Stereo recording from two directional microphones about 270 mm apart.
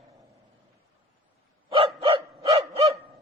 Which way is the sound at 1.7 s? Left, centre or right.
Centre.